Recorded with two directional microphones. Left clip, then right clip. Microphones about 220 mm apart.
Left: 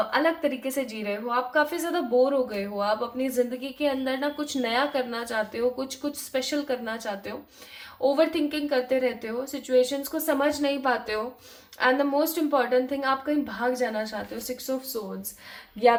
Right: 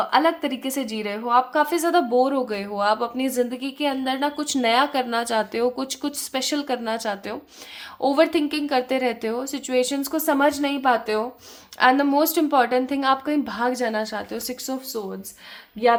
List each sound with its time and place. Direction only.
0.1 s a woman's voice: 40° right (ahead or behind)